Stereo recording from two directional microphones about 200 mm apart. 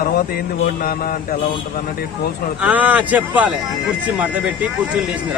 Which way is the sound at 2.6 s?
5° right (ahead or behind).